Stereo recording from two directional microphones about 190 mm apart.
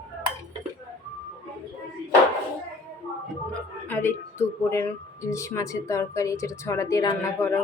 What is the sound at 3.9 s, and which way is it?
Speech, 10° left (ahead or behind).